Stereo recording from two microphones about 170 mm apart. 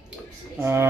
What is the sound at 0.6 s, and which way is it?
Speech, 15° right (ahead or behind).